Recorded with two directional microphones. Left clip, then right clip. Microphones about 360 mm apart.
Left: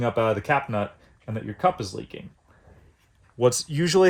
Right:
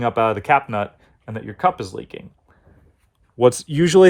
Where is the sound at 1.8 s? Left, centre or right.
Centre.